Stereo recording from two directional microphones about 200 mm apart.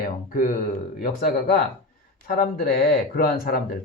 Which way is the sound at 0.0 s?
40° left (ahead or behind).